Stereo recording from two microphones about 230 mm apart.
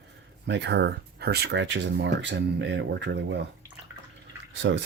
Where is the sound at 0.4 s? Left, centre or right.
Right.